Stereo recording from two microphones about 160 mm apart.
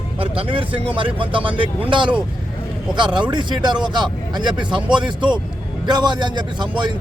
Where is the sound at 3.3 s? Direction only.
30° right (ahead or behind).